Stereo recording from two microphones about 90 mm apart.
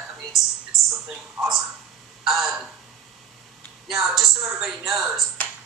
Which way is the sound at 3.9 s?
5° right (ahead or behind).